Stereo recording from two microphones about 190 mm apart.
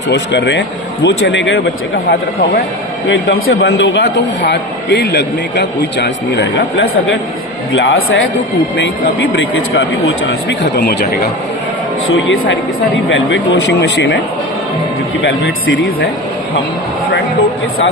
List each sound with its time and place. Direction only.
0.1 s a man's voice: 65° left (ahead or behind)
3.1 s a man's voice: 90° left; by 7.2 s 65° left (ahead or behind)
7.7 s a man's voice: 90° left
12.0 s a man's voice: 90° left
13.1 s a man's voice: 80° left
15.2 s a man's voice: 85° left